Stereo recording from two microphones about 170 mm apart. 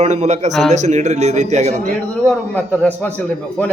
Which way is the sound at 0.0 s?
40° right (ahead or behind).